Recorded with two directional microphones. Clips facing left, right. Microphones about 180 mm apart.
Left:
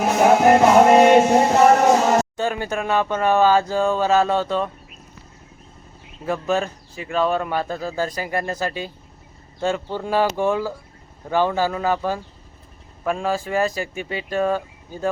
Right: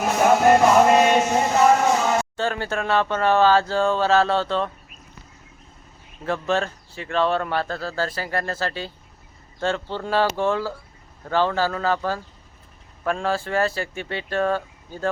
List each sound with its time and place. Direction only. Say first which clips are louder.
0.0 s music: left 2 dB; 15° left (ahead or behind)
1.1 s music: left 5 dB; 40° left (ahead or behind)
2.3 s speech: left 1 dB; 15° left (ahead or behind)
6.2 s speech: left 1 dB; 5° left (ahead or behind)